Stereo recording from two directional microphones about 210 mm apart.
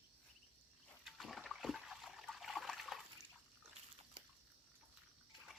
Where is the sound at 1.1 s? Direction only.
Centre (ahead or behind).